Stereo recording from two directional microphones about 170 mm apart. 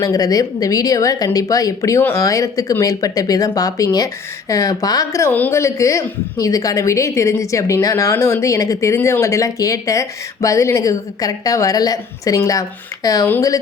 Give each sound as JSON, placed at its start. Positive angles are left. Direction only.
{"t": 0.0, "sound": "speech", "side_deg": 20}